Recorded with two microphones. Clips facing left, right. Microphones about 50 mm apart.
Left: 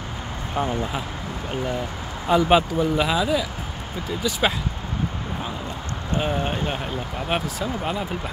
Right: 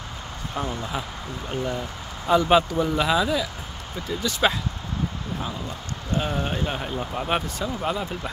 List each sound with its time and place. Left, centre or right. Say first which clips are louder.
0.6 s speech: left 4 dB; centre
2.2 s speech: left 1 dB; centre
6.2 s speech: left 3 dB; centre